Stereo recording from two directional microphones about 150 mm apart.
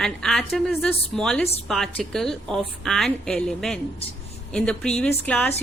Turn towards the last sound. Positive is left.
turn(degrees=10)  # may be behind; listen again after turning